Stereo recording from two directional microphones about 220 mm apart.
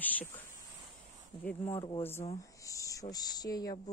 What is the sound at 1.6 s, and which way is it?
Speech, 20° left (ahead or behind).